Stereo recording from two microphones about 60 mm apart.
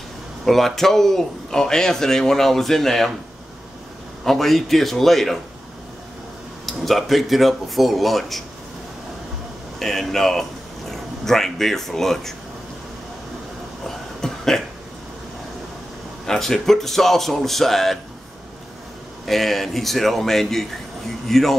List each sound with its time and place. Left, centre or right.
0.5 s a man's voice: centre
4.2 s speech: centre
6.6 s speech: centre
9.8 s speech: centre
13.8 s a sound: centre
16.3 s speech: centre
19.2 s speech: centre